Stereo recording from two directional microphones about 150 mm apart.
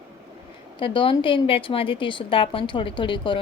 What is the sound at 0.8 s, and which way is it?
A woman's voice, 35° left (ahead or behind).